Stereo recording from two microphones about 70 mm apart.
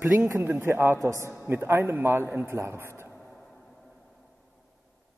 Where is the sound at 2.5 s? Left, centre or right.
Right.